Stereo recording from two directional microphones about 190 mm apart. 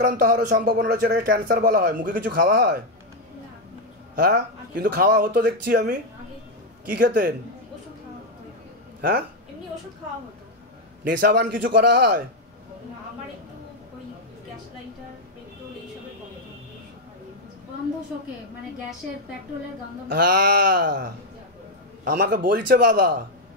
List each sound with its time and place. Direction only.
0.0 s a man's voice: 50° right (ahead or behind)
4.1 s a man's voice: 50° right (ahead or behind)
11.1 s a man's voice: 50° right (ahead or behind)
20.1 s a man's voice: 50° right (ahead or behind)